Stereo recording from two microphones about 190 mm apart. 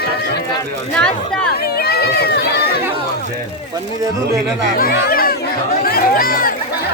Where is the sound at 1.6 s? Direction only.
55° left (ahead or behind).